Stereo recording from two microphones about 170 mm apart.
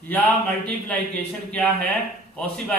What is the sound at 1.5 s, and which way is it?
Speech, 5° left (ahead or behind).